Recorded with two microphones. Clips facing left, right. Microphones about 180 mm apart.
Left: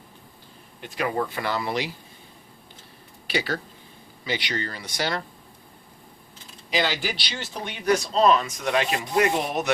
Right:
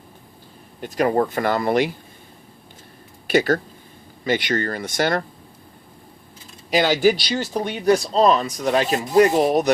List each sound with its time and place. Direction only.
0.8 s speech: 45° right (ahead or behind)
3.2 s speech: 50° right (ahead or behind)
6.7 s speech: 45° right (ahead or behind)